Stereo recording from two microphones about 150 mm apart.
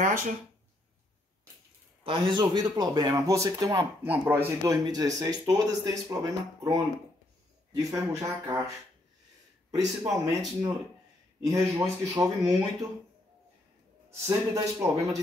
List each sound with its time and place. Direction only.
0.0 s speech: 70° right (ahead or behind)
2.0 s speech: 35° right (ahead or behind)
10.0 s speech: centre (ahead or behind)
11.4 s speech: 25° right (ahead or behind)
14.2 s speech: 20° right (ahead or behind)